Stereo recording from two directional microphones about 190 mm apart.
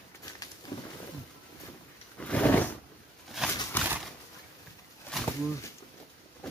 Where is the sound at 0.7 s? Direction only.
20° left (ahead or behind).